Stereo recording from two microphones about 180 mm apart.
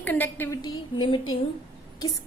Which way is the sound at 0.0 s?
10° left (ahead or behind).